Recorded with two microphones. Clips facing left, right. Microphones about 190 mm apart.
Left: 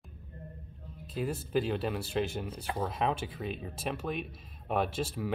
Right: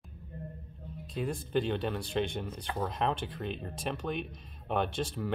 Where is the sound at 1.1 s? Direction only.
5° left (ahead or behind).